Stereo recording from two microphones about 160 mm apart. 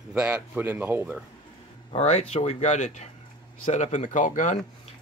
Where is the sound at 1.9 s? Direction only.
40° left (ahead or behind).